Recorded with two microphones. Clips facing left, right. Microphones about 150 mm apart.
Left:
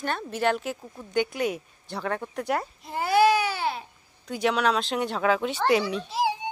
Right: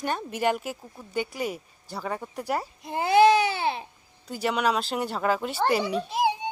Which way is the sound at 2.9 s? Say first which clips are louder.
Right 2 dB; 20° right (ahead or behind).